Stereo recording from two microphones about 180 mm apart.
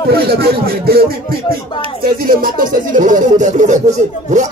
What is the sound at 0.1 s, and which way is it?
Speech, 60° right (ahead or behind).